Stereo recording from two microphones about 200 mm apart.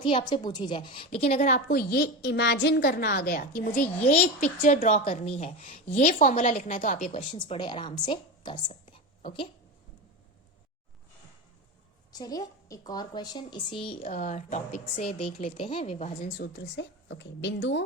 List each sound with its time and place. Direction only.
0.0 s a woman's voice: 25° left (ahead or behind); by 3.8 s 45° left (ahead or behind)
4.0 s a woman's voice: 35° left (ahead or behind)
7.2 s a woman's voice: 25° left (ahead or behind)
12.1 s a woman's voice: 20° left (ahead or behind)
14.0 s a woman's voice: 40° left (ahead or behind)
16.4 s a woman's voice: 55° left (ahead or behind)